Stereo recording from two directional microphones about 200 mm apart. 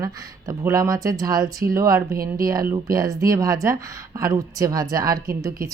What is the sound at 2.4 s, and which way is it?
Speech, 20° right (ahead or behind).